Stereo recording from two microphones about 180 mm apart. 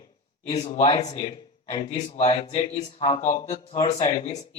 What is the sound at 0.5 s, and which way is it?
Speech, 35° left (ahead or behind).